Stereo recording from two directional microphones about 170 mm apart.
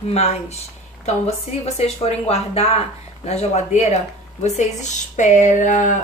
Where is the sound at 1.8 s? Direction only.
35° left (ahead or behind).